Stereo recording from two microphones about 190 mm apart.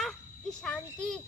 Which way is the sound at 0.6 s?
5° left (ahead or behind).